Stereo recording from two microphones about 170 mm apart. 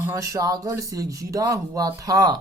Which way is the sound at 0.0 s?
20° right (ahead or behind).